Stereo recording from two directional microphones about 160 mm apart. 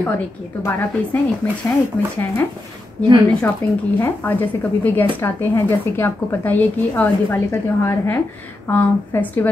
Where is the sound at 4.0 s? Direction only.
10° left (ahead or behind).